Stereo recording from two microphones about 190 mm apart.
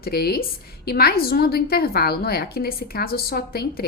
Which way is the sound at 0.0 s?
55° left (ahead or behind).